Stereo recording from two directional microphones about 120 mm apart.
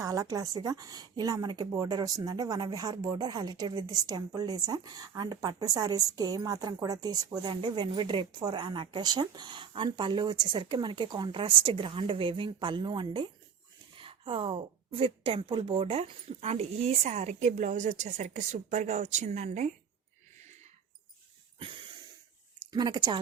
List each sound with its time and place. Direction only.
0.0 s a woman's voice: 30° right (ahead or behind); by 19.7 s 75° right (ahead or behind)
22.6 s a woman's voice: 35° right (ahead or behind)